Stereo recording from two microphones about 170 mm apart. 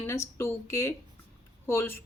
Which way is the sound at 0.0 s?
15° left (ahead or behind).